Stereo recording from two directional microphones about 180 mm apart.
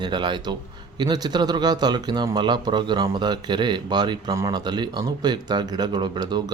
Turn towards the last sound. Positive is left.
turn(degrees=-25)  # may be behind; listen again after turning